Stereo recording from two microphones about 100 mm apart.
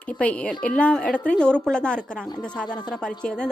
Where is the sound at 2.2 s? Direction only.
45° left (ahead or behind).